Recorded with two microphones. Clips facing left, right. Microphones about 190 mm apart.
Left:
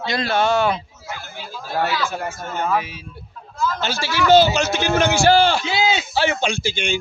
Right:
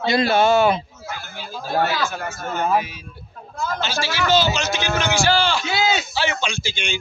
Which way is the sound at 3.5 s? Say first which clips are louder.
Left 3 dB; 55° right (ahead or behind).